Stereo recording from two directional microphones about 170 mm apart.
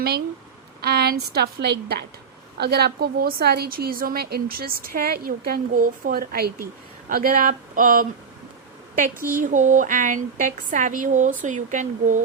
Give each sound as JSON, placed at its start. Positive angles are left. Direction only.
{"t": 0.8, "sound": "a woman's voice", "side_deg": -65}
{"t": 9.4, "sound": "speech", "side_deg": -45}